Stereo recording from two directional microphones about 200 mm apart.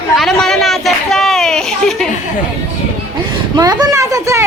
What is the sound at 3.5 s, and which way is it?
Speech, 20° right (ahead or behind).